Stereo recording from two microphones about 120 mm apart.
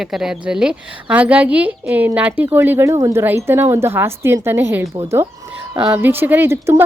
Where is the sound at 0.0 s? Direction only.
5° right (ahead or behind).